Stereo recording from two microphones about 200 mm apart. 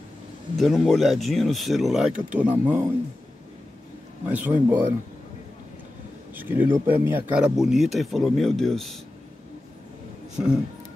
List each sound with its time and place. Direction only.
0.6 s speech: centre (ahead or behind)
4.3 s speech: 10° right (ahead or behind)
6.3 s speech: 10° right (ahead or behind)
10.3 s speech: 5° right (ahead or behind)